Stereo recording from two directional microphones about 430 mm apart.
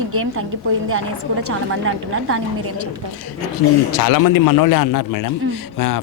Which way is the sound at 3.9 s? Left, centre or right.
Left.